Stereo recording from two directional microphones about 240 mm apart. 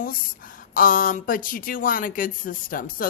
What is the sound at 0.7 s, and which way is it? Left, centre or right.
Speech, left.